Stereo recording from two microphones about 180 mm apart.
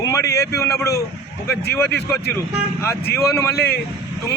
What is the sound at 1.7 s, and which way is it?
Speech, 10° left (ahead or behind).